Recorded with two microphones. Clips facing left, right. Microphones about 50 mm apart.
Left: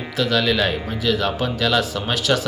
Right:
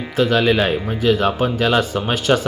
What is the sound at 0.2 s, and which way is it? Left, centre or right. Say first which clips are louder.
Speech: right 4 dB; centre.